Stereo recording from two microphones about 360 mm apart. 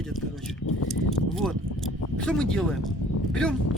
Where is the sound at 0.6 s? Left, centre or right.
Left.